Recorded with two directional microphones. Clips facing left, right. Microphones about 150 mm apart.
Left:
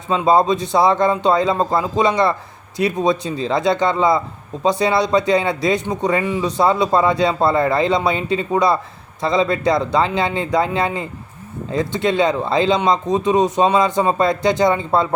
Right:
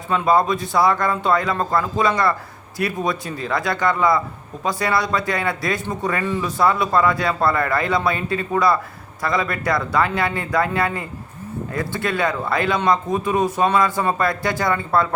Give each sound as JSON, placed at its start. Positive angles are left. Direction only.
{"t": 0.1, "sound": "speech", "side_deg": 25}